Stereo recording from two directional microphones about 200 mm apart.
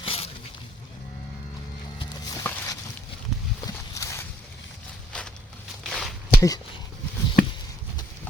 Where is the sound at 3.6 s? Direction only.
15° left (ahead or behind).